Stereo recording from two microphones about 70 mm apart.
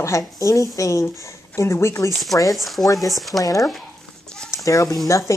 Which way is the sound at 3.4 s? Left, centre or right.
Left.